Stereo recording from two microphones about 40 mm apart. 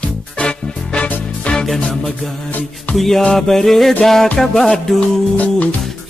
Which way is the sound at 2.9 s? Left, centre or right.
Centre.